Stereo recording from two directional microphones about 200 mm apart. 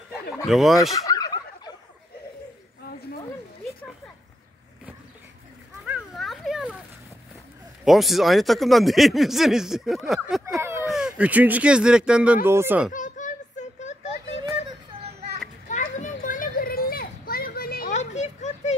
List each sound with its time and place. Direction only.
0.5 s speech: centre (ahead or behind)
0.9 s fowl: 15° left (ahead or behind)
5.9 s children playing: centre (ahead or behind)
7.8 s speech: centre (ahead or behind)
10.6 s a sound: 15° right (ahead or behind)
10.9 s speech: 5° right (ahead or behind)
12.9 s a sound: 40° left (ahead or behind)
15.7 s children playing: 40° left (ahead or behind)